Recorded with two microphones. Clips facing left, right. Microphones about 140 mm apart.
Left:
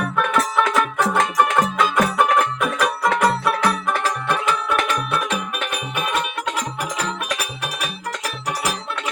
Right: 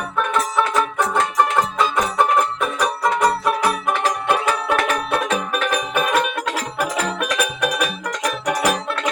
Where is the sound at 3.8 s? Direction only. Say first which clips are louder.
Right 2 dB; 20° right (ahead or behind); by 6.3 s 40° right (ahead or behind).